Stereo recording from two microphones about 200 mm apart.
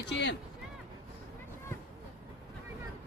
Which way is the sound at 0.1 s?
60° left (ahead or behind).